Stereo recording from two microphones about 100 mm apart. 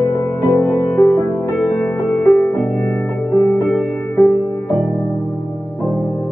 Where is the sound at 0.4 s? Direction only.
20° left (ahead or behind).